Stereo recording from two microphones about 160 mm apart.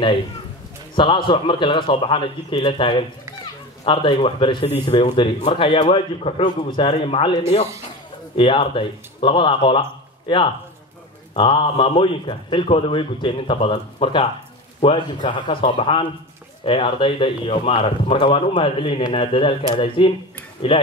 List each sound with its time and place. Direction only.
0.9 s speech: 30° left (ahead or behind)
8.4 s speech: 35° left (ahead or behind)